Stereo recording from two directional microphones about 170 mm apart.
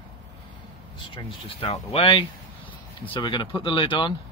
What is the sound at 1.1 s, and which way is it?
Speech, 30° left (ahead or behind).